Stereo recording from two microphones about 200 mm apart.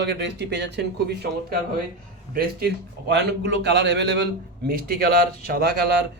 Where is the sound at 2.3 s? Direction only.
50° right (ahead or behind).